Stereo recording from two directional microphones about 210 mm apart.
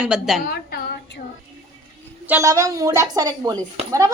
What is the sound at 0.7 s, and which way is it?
Female singing, 50° left (ahead or behind).